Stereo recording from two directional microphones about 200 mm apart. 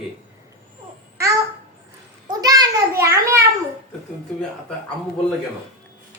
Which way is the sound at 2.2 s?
20° right (ahead or behind).